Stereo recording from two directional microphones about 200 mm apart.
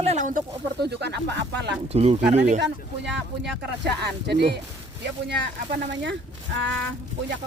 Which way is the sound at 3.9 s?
55° right (ahead or behind).